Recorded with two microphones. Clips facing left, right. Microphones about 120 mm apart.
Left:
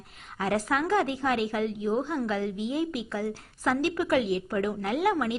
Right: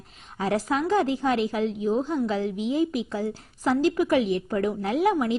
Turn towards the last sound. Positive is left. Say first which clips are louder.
# right 3 dB
turn(degrees=-25)  # may be behind; listen again after turning